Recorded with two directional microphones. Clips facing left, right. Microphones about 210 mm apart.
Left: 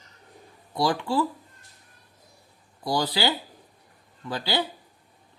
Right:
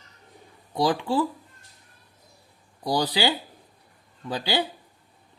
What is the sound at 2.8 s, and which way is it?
Speech, 20° right (ahead or behind).